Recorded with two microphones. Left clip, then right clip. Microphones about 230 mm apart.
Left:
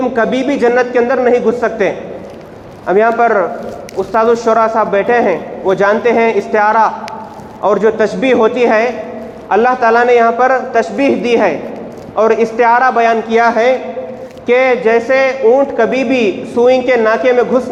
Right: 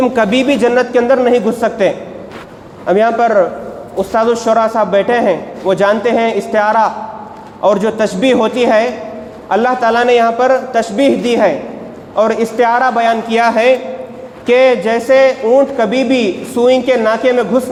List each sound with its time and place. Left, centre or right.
0.0 s a man's voice: right